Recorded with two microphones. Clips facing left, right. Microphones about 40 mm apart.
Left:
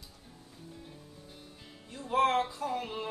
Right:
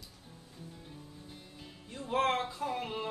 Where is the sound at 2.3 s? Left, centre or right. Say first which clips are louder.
Left 2 dB; centre.